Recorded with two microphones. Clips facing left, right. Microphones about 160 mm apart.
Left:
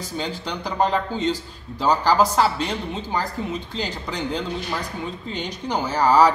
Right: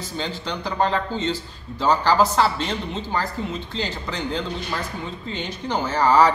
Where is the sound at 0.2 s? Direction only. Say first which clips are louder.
Right 1 dB; 10° left (ahead or behind).